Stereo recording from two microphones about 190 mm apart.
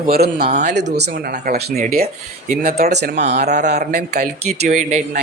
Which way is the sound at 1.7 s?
40° right (ahead or behind).